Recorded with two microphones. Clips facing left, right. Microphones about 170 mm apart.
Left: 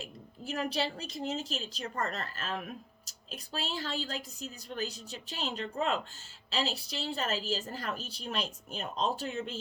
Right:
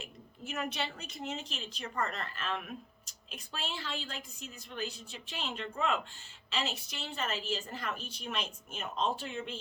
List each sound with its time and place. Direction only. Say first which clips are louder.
0.0 s a woman's voice: left 3 dB; 35° left (ahead or behind)